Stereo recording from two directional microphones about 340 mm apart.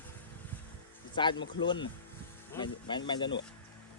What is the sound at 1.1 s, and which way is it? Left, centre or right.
Speech, centre.